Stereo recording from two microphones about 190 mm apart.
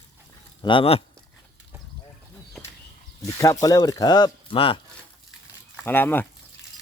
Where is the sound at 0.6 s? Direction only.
25° left (ahead or behind).